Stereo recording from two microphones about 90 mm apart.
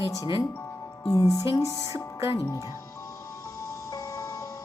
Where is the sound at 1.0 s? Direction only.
40° left (ahead or behind).